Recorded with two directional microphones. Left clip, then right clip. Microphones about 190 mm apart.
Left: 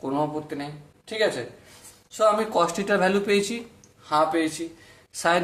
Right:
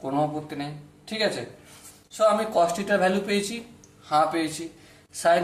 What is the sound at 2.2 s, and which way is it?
A man's voice, 20° left (ahead or behind).